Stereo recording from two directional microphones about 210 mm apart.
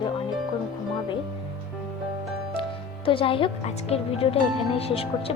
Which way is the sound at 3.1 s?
25° left (ahead or behind).